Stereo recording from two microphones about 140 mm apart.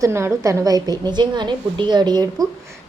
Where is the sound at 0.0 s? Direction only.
20° right (ahead or behind).